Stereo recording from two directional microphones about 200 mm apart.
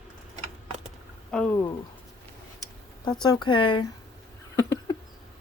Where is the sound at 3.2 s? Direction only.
20° left (ahead or behind).